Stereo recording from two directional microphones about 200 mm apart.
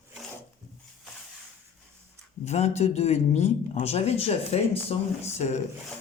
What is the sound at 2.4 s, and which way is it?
Speech, 35° left (ahead or behind).